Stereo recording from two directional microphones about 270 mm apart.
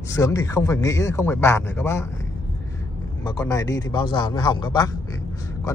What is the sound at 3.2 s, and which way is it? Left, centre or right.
A man's voice, centre.